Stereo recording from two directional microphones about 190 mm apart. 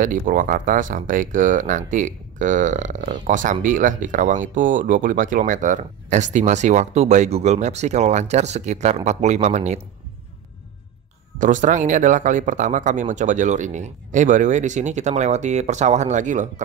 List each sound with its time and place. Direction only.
0.0 s speech: 45° right (ahead or behind)
11.3 s speech: 40° right (ahead or behind)